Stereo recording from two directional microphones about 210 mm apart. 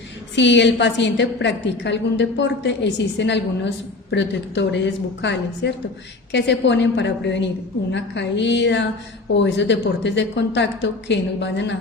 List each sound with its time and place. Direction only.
0.3 s a woman's voice: 55° left (ahead or behind)